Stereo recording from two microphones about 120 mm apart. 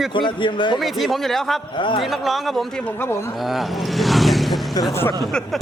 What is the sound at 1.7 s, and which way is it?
Speech, 45° left (ahead or behind).